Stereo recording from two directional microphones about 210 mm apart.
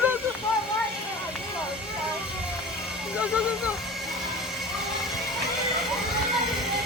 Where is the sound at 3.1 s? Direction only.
5° right (ahead or behind).